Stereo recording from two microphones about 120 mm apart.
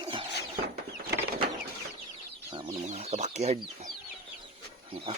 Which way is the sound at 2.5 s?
50° right (ahead or behind).